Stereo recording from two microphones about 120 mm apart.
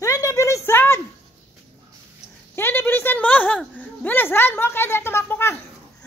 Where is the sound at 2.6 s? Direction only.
20° left (ahead or behind).